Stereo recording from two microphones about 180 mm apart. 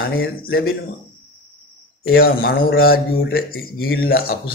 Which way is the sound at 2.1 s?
55° left (ahead or behind).